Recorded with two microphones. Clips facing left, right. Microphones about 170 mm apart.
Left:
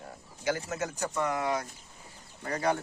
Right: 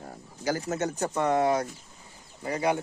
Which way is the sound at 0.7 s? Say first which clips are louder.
Right 5 dB; 30° right (ahead or behind).